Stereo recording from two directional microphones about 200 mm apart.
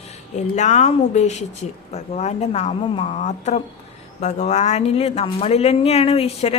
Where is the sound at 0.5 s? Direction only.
35° left (ahead or behind).